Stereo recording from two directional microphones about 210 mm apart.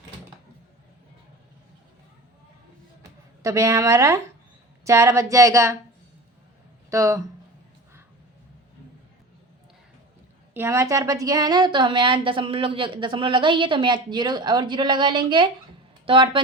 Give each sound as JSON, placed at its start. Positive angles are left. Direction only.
{"t": 3.0, "sound": "speech", "side_deg": -15}
{"t": 6.9, "sound": "speech", "side_deg": -15}
{"t": 10.5, "sound": "a woman's voice", "side_deg": -10}